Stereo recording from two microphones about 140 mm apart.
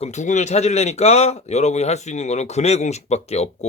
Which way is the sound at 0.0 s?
55° left (ahead or behind).